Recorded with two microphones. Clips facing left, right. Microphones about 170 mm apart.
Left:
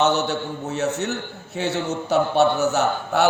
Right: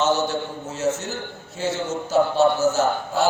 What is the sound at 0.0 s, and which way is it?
A man's voice, 65° left (ahead or behind).